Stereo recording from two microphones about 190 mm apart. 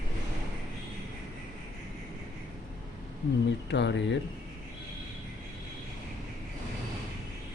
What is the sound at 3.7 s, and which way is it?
Speech, 65° left (ahead or behind).